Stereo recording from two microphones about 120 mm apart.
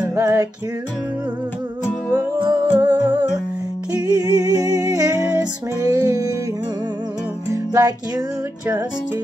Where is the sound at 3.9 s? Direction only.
35° right (ahead or behind).